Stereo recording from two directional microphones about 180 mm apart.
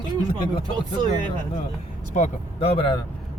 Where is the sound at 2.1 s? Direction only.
35° left (ahead or behind).